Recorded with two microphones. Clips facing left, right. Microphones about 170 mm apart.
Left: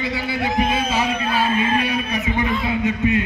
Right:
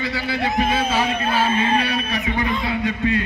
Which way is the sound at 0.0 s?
20° left (ahead or behind).